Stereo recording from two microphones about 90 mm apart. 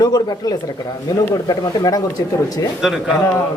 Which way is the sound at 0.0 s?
50° left (ahead or behind).